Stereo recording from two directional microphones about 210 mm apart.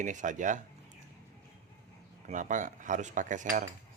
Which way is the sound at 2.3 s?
35° right (ahead or behind).